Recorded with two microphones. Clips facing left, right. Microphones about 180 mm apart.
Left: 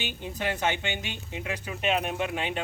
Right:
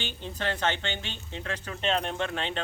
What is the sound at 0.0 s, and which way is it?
Speech, 10° left (ahead or behind).